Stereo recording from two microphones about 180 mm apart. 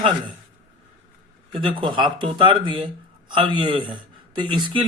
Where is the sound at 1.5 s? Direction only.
25° right (ahead or behind).